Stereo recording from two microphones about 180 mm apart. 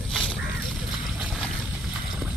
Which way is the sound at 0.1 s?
Centre (ahead or behind).